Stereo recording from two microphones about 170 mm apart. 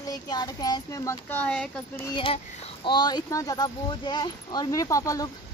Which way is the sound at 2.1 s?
30° left (ahead or behind).